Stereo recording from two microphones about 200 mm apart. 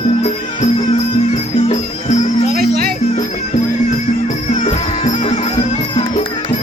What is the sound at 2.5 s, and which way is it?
Music, 50° right (ahead or behind).